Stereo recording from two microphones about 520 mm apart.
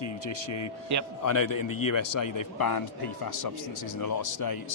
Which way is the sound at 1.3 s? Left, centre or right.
Left.